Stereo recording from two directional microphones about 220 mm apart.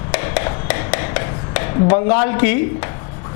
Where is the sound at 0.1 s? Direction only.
15° left (ahead or behind).